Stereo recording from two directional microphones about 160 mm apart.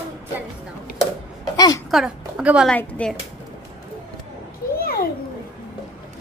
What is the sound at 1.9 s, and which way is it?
Speech, 5° right (ahead or behind).